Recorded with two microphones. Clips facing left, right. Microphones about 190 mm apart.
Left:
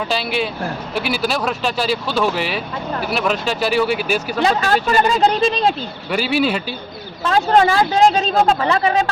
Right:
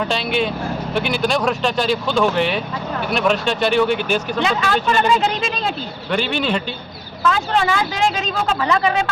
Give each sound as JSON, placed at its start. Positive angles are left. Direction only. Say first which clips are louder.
{"t": 0.0, "sound": "speech", "louder": "right 1 dB", "side_deg": 0}
{"t": 4.4, "sound": "speech", "louder": "left 4 dB", "side_deg": 40}
{"t": 6.1, "sound": "speech", "louder": "left 2 dB", "side_deg": 5}
{"t": 7.3, "sound": "speech", "louder": "left 4 dB", "side_deg": 35}